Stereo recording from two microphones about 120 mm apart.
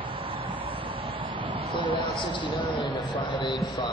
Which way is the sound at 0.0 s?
50° right (ahead or behind).